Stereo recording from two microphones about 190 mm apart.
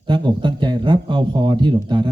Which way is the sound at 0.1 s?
25° right (ahead or behind).